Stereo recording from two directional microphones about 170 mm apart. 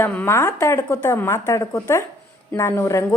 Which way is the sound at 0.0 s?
10° left (ahead or behind).